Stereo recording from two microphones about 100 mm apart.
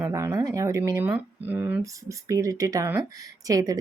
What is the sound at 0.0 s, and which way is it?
Speech, 30° right (ahead or behind).